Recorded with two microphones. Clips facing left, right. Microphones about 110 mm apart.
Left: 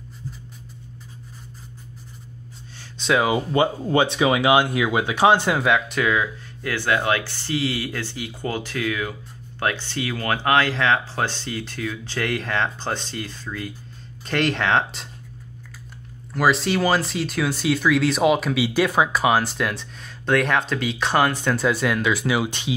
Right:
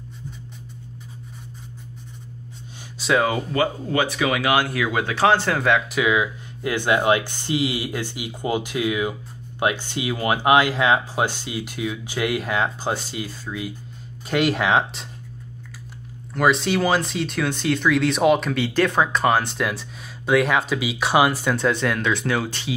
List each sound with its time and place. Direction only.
3.0 s speech: centre (ahead or behind)
3.3 s speech: 20° left (ahead or behind)
5.6 s speech: centre (ahead or behind)
16.3 s speech: centre (ahead or behind)
21.5 s speech: 5° left (ahead or behind)
22.5 s speech: 20° left (ahead or behind)